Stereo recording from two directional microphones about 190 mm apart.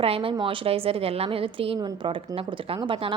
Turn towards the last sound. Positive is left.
turn(degrees=-25)  # may be behind; listen again after turning